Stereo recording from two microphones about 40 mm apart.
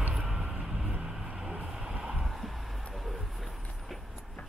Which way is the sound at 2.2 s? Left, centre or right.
Centre.